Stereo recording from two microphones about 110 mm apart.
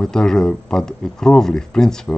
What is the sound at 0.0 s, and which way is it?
Speech, 5° left (ahead or behind).